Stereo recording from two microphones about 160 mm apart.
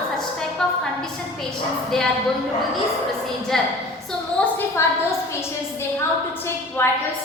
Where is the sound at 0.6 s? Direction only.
5° left (ahead or behind).